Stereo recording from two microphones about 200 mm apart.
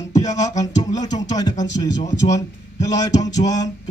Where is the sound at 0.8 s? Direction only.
20° left (ahead or behind).